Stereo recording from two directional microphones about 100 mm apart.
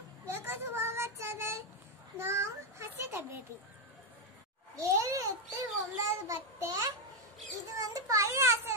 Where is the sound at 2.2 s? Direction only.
25° right (ahead or behind).